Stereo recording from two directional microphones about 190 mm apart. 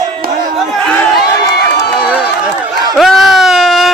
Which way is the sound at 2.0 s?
5° right (ahead or behind).